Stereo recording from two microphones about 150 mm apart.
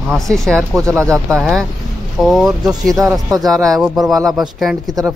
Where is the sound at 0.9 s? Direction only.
20° right (ahead or behind).